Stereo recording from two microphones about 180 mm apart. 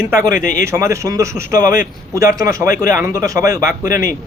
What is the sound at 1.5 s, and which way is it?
Speech, 50° left (ahead or behind).